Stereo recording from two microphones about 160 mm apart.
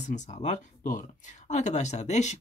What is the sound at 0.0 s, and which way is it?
Speech, 50° left (ahead or behind).